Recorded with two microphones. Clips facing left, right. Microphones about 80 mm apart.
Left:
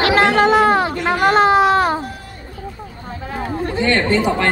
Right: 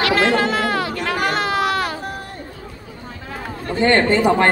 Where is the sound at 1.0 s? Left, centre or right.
Left.